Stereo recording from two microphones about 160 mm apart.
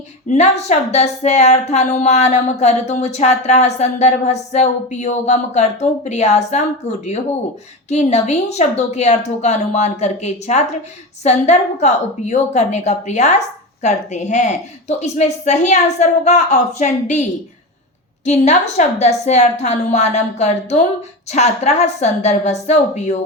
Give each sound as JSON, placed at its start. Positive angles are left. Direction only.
{"t": 0.3, "sound": "speech", "side_deg": 45}
{"t": 18.3, "sound": "speech", "side_deg": 45}